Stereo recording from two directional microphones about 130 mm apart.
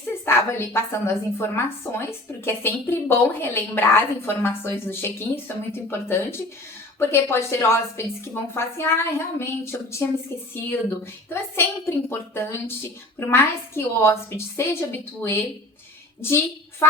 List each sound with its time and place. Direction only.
0.3 s a woman's voice: 20° left (ahead or behind)